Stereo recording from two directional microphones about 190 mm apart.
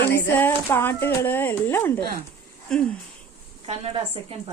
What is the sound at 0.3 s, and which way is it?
A woman's voice, 10° left (ahead or behind).